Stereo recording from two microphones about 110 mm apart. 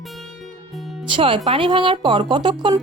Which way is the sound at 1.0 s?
50° right (ahead or behind).